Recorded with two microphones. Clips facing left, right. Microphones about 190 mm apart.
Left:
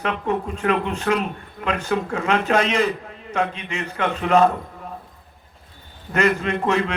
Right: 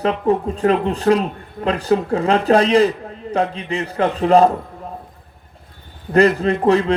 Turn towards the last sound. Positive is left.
turn(degrees=-35)  # may be behind; listen again after turning